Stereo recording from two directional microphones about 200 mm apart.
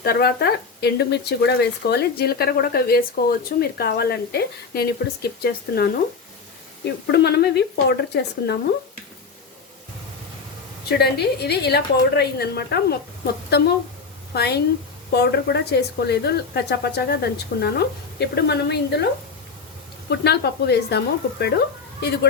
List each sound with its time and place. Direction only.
0.0 s speech: 50° left (ahead or behind)
10.8 s speech: 55° left (ahead or behind)
14.3 s speech: 55° left (ahead or behind)
20.1 s speech: 55° left (ahead or behind)